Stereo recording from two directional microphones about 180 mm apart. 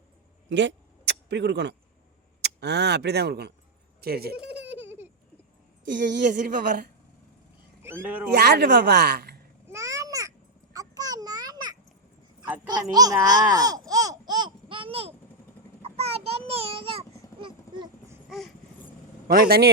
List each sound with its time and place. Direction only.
1.3 s a woman's voice: 75° right (ahead or behind)
4.4 s baby laughter: 10° right (ahead or behind)
6.1 s speech: 50° right (ahead or behind)
7.8 s speech: 15° right (ahead or behind)
8.3 s a woman's voice: 65° right (ahead or behind)
9.6 s babbling: 15° right (ahead or behind); by 15.1 s 30° right (ahead or behind)
15.8 s child singing: 35° right (ahead or behind)
17.7 s a sound: 25° right (ahead or behind)
18.3 s a sound: centre (ahead or behind)
19.3 s a man's voice: 60° right (ahead or behind)